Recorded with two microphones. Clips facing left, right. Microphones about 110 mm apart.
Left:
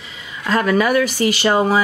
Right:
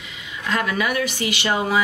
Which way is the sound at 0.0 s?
35° left (ahead or behind).